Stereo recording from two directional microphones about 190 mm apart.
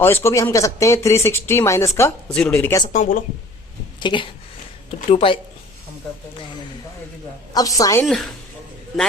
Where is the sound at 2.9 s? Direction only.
45° left (ahead or behind).